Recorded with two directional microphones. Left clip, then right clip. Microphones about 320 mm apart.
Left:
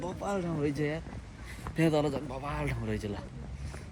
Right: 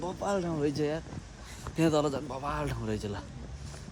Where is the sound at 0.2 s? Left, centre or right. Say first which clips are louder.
Right 3 dB; right.